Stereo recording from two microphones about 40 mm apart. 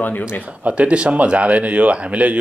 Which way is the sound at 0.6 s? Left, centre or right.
Right.